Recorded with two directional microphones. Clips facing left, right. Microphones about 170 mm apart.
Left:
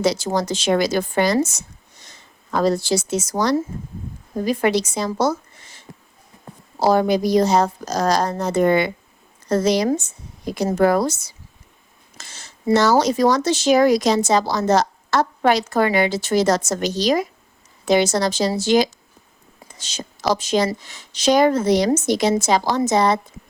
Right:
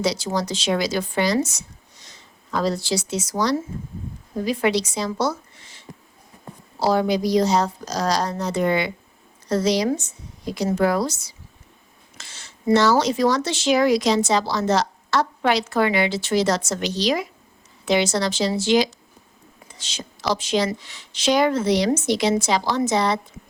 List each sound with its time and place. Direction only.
0.0 s speech: 50° left (ahead or behind)
12.1 s a sound: 40° left (ahead or behind)
12.7 s speech: 40° left (ahead or behind)